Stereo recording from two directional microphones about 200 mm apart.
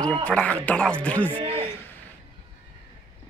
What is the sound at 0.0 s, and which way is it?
Speech, 5° left (ahead or behind).